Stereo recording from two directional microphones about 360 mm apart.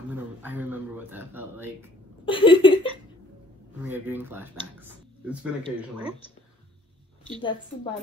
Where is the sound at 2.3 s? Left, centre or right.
Centre.